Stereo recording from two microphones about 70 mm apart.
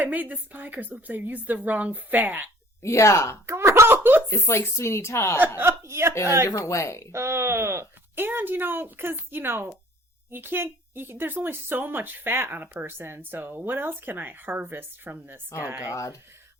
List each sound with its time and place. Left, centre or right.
0.0 s a woman's voice: right
2.8 s speech: left
3.4 s speech: right
4.3 s speech: left
5.5 s speech: right
6.7 s speech: left
7.1 s a woman's voice: right
15.9 s speech: left